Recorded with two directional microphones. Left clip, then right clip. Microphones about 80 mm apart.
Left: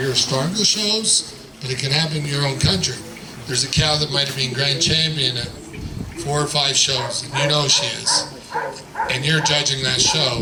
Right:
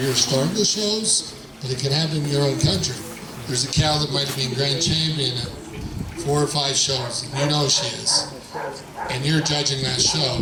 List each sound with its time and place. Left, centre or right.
0.1 s speech: left
6.3 s speech: left